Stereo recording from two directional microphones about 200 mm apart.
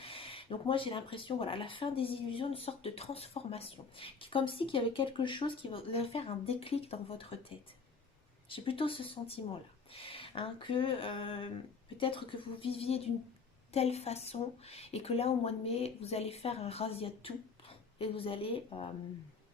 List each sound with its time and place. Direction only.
0.0 s speech: 25° left (ahead or behind)
8.4 s speech: 25° left (ahead or behind)